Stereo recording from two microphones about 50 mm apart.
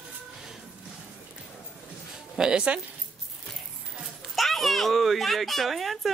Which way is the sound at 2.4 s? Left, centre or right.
Centre.